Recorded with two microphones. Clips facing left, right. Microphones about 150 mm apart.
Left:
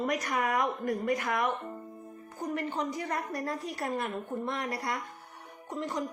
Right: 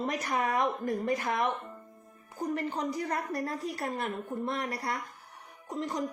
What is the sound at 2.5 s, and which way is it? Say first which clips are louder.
A woman's voice: even; 35° right (ahead or behind).